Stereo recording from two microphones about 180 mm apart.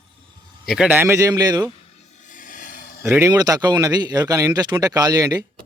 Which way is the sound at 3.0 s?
15° right (ahead or behind).